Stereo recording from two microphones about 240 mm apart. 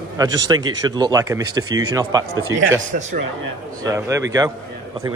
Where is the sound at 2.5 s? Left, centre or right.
Right.